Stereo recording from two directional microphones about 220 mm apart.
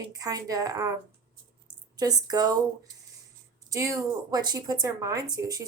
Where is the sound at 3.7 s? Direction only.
15° right (ahead or behind).